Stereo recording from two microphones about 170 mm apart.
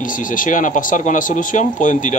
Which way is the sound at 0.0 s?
50° left (ahead or behind).